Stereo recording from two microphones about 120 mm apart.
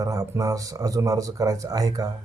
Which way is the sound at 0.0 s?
30° right (ahead or behind).